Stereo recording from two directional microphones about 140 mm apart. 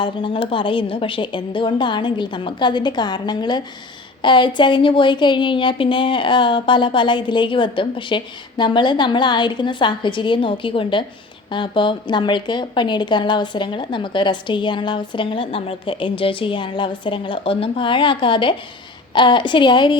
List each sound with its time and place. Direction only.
0.0 s a woman's voice: 35° left (ahead or behind)